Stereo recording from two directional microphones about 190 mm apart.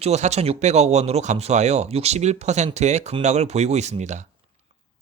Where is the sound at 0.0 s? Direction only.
35° right (ahead or behind).